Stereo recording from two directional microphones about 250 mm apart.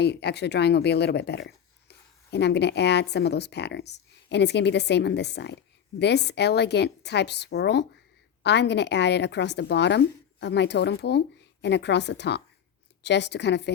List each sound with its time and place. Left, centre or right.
0.0 s speech: left